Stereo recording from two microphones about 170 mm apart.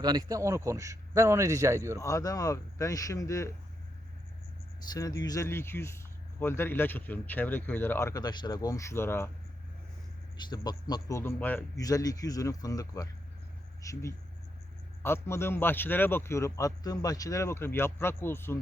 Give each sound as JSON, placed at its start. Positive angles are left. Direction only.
{"t": 0.0, "sound": "speech", "side_deg": -25}
{"t": 2.0, "sound": "speech", "side_deg": 20}
{"t": 4.9, "sound": "speech", "side_deg": 20}
{"t": 10.3, "sound": "speech", "side_deg": 25}
{"t": 11.2, "sound": "speech", "side_deg": 10}
{"t": 11.8, "sound": "speech", "side_deg": 20}